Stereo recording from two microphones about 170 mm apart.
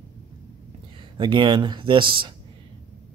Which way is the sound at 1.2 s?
25° right (ahead or behind).